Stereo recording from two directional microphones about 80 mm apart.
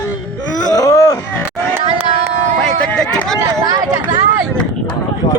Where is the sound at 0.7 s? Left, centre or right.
Left.